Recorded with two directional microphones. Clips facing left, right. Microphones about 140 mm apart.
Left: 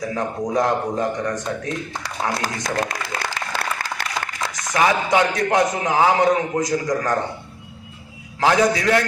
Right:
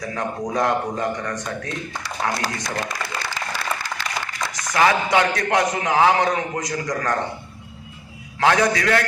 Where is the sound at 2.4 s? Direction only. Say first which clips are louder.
Left 3 dB; 45° left (ahead or behind).